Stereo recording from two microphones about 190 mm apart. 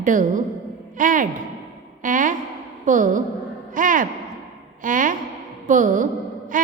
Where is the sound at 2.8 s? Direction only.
40° right (ahead or behind).